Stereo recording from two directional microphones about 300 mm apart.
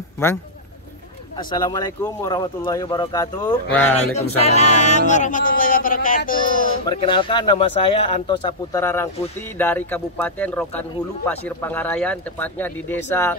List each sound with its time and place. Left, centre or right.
1.3 s speech: centre
4.4 s speech: left
6.8 s a man's voice: centre